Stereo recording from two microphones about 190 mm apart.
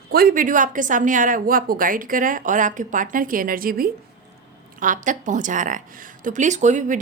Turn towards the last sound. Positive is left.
turn(degrees=-40)  # may be behind; listen again after turning